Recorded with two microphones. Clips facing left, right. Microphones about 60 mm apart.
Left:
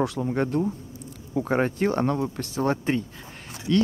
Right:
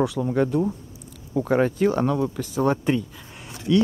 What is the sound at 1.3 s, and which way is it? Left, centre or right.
Speech, centre.